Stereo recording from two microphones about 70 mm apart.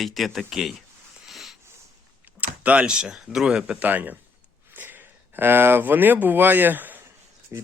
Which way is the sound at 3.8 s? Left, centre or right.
Right.